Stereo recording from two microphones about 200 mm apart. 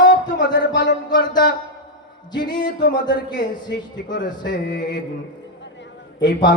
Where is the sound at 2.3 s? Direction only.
20° left (ahead or behind).